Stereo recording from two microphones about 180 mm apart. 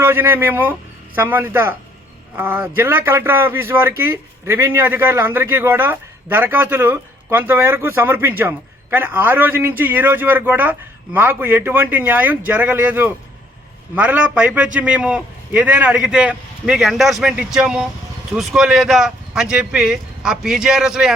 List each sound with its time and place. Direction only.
0.0 s a man's voice: 10° right (ahead or behind)